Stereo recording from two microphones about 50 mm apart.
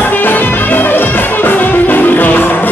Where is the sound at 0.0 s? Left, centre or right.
Left.